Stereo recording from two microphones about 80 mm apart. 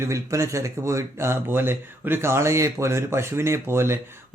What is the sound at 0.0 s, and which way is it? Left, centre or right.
Speech, right.